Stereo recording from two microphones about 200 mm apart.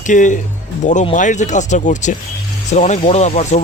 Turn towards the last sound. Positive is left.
turn(degrees=35)  # may be behind; listen again after turning